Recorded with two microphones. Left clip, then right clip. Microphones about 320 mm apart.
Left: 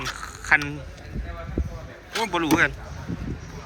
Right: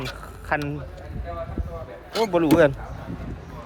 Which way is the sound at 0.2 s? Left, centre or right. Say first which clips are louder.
Left 7 dB; centre.